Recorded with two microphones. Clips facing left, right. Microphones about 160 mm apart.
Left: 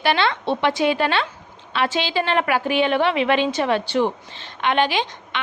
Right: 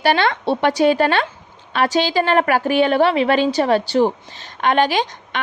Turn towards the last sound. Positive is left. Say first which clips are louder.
# right 3 dB
turn(degrees=-45)  # may be behind; listen again after turning